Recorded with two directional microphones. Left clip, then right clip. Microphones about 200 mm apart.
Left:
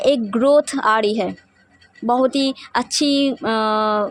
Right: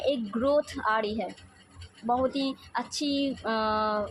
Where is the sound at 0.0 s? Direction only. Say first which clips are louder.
Left 11 dB; 50° left (ahead or behind).